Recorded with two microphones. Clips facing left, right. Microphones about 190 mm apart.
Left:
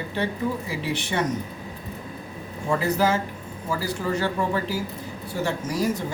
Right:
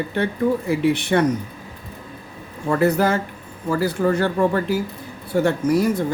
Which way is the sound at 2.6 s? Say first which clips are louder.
Right 4 dB; 60° right (ahead or behind).